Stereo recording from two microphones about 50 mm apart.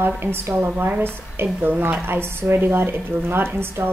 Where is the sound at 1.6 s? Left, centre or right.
Right.